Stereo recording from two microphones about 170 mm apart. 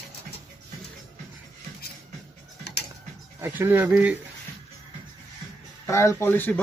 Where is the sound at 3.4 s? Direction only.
10° right (ahead or behind).